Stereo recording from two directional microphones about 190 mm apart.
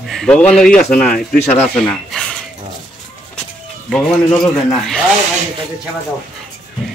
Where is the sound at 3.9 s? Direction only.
Centre (ahead or behind).